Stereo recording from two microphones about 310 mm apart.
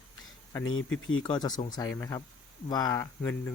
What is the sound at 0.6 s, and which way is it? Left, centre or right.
Speech, left.